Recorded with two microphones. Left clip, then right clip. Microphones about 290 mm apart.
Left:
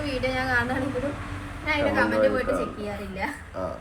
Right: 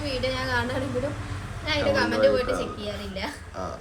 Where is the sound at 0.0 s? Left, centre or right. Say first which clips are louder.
Even; right.